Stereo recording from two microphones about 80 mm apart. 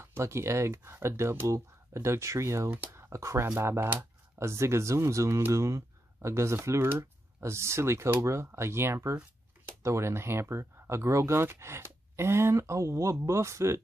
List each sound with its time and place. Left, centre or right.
0.0 s speech: right